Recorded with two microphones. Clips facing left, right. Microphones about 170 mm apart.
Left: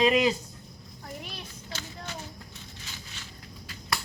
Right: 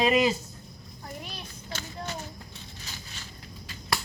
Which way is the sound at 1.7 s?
50° right (ahead or behind).